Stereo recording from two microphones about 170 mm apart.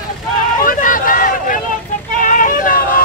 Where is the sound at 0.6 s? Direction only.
55° left (ahead or behind).